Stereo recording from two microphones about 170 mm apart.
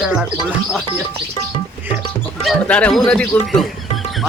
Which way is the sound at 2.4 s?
5° left (ahead or behind).